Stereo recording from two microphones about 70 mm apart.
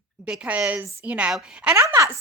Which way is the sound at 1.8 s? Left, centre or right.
Right.